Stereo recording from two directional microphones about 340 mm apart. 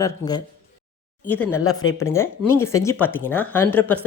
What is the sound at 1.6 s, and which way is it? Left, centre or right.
Speech, left.